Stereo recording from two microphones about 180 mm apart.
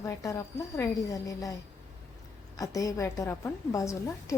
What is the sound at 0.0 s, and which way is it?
A woman's voice, 20° left (ahead or behind).